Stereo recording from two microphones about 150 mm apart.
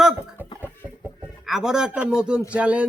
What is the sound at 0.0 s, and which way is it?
Chicken, 10° right (ahead or behind).